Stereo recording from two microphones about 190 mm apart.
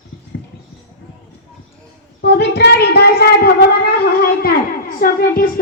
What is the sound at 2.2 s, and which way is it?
Speech, 60° left (ahead or behind).